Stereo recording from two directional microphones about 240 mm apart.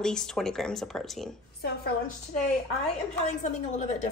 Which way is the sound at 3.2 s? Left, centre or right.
Left.